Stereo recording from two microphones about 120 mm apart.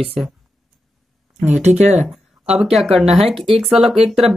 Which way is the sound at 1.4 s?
65° right (ahead or behind).